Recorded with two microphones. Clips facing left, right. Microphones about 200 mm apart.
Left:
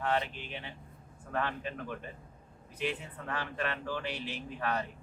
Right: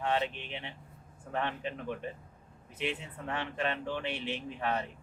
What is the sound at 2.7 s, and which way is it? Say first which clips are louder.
A man's voice: even; 25° right (ahead or behind).